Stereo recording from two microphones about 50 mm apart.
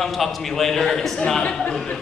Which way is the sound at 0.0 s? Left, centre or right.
Centre.